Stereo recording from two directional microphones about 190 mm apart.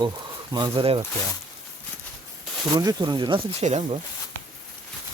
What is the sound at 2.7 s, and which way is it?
Speech, 20° right (ahead or behind).